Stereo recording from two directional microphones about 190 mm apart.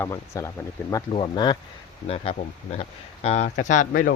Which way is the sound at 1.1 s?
25° left (ahead or behind).